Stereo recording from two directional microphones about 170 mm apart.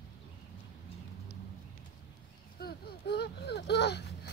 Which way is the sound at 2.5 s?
70° left (ahead or behind).